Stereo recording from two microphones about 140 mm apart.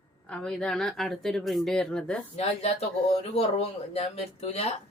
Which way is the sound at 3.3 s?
45° left (ahead or behind).